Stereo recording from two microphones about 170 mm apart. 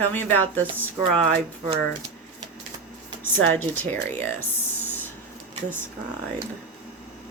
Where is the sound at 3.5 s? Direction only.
10° left (ahead or behind).